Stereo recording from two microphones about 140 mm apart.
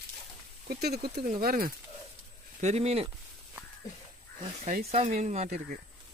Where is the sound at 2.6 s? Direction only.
50° right (ahead or behind).